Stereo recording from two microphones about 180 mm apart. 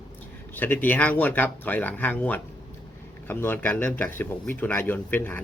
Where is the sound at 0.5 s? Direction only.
10° left (ahead or behind).